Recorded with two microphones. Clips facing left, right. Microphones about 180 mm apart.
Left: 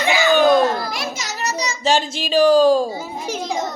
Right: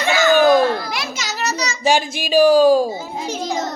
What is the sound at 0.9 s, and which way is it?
Speech, 75° right (ahead or behind).